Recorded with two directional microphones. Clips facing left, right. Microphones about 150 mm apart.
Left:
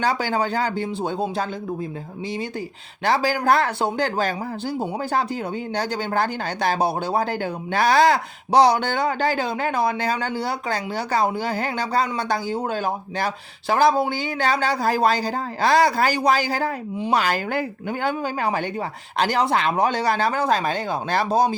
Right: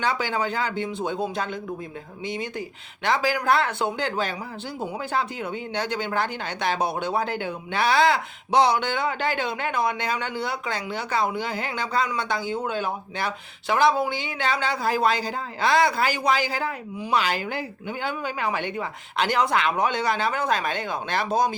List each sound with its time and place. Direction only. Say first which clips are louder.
0.0 s speech: left 3 dB; 40° left (ahead or behind)
3.0 s speech: left 3 dB; 35° left (ahead or behind)